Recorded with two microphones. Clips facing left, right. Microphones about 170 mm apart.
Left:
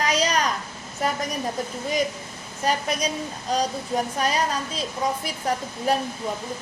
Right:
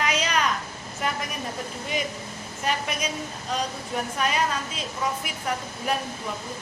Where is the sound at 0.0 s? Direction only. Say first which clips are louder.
Left 2 dB; 35° left (ahead or behind).